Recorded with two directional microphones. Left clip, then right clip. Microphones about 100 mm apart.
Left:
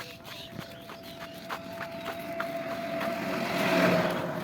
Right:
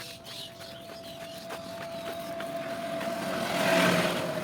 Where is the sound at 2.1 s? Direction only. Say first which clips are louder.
Even; 10° right (ahead or behind).